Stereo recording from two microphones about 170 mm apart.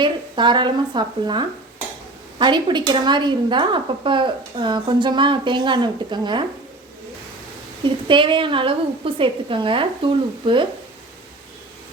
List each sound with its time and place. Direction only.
0.0 s a woman's voice: 25° right (ahead or behind)
7.9 s a woman's voice: 30° right (ahead or behind)